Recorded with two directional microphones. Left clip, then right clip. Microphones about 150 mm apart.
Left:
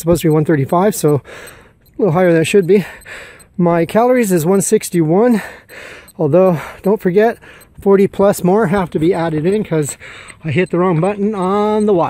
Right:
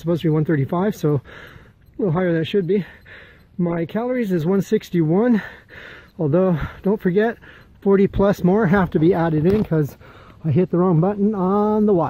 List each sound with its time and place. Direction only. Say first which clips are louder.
0.0 s speech: left 8 dB; 30° left (ahead or behind); by 12.1 s centre (ahead or behind)